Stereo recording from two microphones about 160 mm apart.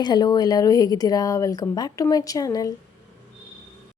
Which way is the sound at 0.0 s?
25° left (ahead or behind).